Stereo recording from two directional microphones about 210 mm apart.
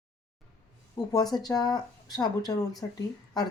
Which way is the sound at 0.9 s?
20° left (ahead or behind).